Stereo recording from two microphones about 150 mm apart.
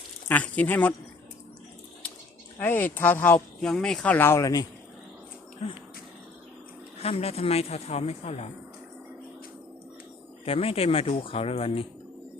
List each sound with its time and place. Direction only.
0.3 s speech: 10° left (ahead or behind)
2.6 s speech: 15° left (ahead or behind)
5.6 s a woman's voice: 40° left (ahead or behind)
7.0 s a woman's voice: 40° left (ahead or behind)
10.4 s speech: 40° left (ahead or behind)